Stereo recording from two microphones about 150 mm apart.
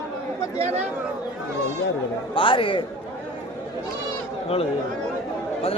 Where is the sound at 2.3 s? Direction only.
35° left (ahead or behind).